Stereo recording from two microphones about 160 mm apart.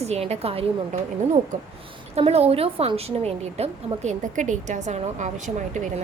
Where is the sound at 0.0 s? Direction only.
40° right (ahead or behind).